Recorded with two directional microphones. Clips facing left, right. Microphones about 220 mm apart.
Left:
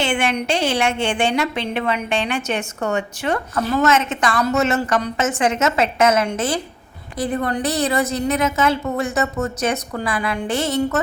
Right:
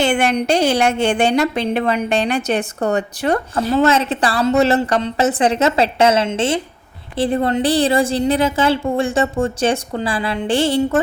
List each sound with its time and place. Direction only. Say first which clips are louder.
0.0 s a woman's voice: right 4 dB; 40° right (ahead or behind)